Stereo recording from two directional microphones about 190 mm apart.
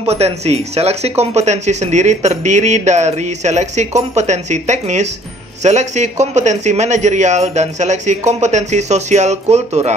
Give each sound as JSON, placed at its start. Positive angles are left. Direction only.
{"t": 0.0, "sound": "speech", "side_deg": -35}